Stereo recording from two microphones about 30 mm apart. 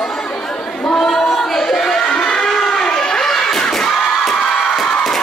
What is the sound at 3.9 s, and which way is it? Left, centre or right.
Crowd, centre.